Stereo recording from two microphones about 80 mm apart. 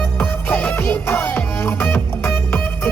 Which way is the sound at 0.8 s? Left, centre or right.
Left.